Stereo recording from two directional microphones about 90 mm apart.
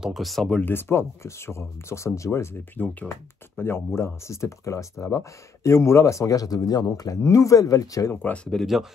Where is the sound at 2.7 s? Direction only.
15° left (ahead or behind).